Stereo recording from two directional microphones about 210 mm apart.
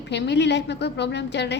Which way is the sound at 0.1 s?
55° left (ahead or behind).